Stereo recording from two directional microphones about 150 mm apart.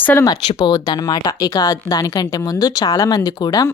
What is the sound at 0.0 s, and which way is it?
Speech, 15° left (ahead or behind).